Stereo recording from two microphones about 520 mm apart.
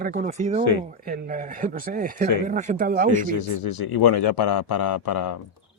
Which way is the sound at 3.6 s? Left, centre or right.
Left.